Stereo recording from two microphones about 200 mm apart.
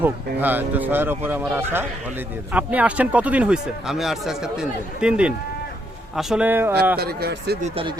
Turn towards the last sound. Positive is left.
turn(degrees=-30)  # may be behind; listen again after turning